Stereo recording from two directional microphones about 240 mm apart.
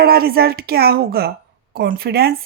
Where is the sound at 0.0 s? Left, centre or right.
Right.